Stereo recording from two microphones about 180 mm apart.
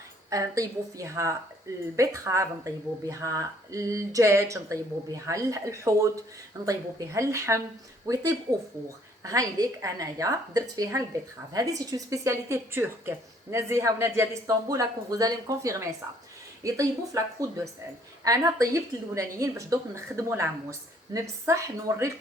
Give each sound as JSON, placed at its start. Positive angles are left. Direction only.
{"t": 0.3, "sound": "a woman's voice", "side_deg": -20}